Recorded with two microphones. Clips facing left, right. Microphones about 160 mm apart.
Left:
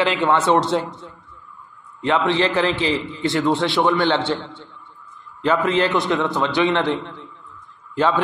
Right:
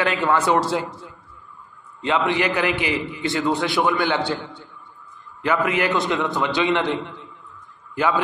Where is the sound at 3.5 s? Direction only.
20° left (ahead or behind).